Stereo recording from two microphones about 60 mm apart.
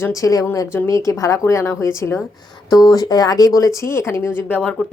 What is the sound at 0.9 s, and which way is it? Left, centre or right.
Speech, left.